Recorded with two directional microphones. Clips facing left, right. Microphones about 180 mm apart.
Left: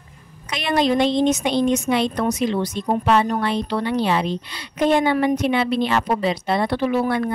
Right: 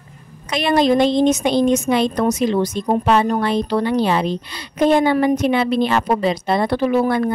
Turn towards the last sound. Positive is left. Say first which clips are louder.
# right 3 dB
turn(degrees=-40)  # may be behind; listen again after turning